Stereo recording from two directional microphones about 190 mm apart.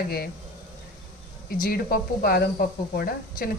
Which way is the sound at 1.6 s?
50° left (ahead or behind).